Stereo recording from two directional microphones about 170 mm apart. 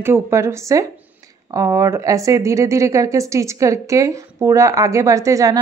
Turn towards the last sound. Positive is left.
turn(degrees=-20)  # may be behind; listen again after turning